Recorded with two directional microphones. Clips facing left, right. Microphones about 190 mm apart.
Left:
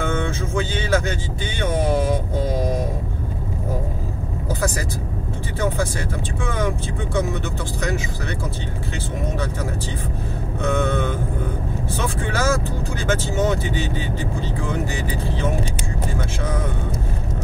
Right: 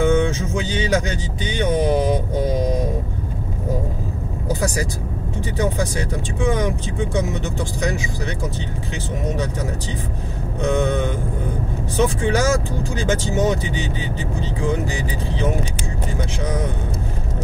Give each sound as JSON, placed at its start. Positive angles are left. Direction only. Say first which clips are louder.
{"t": 0.0, "sound": "music", "louder": "right 6 dB", "side_deg": -15}
{"t": 4.5, "sound": "vehicle", "louder": "right 2 dB", "side_deg": -15}
{"t": 5.6, "sound": "speech", "louder": "right 1 dB", "side_deg": -15}
{"t": 10.6, "sound": "speech", "louder": "right 2 dB", "side_deg": -15}